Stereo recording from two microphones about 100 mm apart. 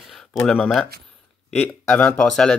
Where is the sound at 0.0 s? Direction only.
Centre (ahead or behind).